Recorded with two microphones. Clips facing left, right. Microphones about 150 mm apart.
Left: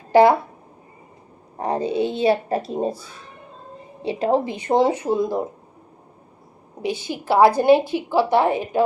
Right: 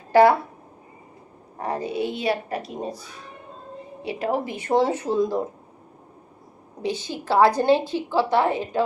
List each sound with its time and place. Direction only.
0.1 s speech: 15° left (ahead or behind)
1.5 s a woman's voice: 20° left (ahead or behind)
6.8 s a woman's voice: 10° left (ahead or behind)